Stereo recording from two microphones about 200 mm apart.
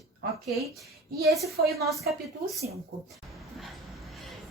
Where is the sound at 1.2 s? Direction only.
Centre (ahead or behind).